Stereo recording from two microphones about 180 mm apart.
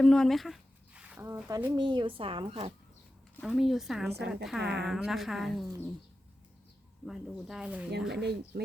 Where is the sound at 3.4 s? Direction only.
Centre (ahead or behind).